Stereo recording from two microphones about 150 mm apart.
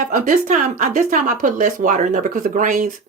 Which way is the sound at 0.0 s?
60° right (ahead or behind).